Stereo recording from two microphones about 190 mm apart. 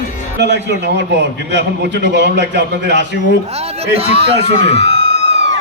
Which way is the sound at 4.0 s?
30° right (ahead or behind).